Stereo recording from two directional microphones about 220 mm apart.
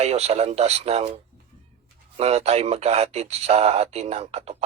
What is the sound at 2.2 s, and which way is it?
Speech, 30° right (ahead or behind).